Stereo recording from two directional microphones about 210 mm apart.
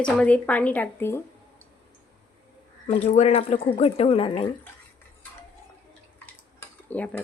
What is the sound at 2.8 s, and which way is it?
Speech, 30° left (ahead or behind).